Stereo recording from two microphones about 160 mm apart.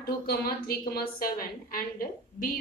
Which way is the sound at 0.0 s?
75° left (ahead or behind).